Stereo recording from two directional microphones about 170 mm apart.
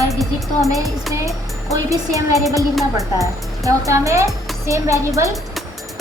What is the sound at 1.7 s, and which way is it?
Speech, 20° right (ahead or behind).